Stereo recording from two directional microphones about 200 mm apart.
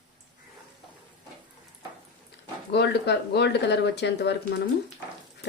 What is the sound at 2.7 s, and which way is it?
Speech, 55° left (ahead or behind).